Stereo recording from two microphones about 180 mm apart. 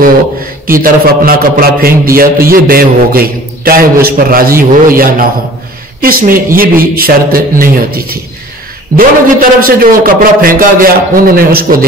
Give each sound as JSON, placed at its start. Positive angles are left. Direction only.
{"t": 0.7, "sound": "a man's voice", "side_deg": -55}